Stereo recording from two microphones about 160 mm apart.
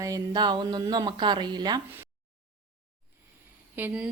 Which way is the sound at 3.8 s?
10° right (ahead or behind).